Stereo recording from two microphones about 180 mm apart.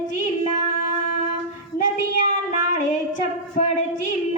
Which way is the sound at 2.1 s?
45° left (ahead or behind).